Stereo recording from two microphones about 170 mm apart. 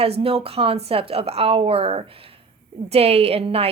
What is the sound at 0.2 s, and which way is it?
Speech, 35° right (ahead or behind).